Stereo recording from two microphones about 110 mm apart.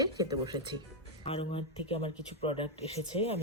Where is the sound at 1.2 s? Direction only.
60° left (ahead or behind).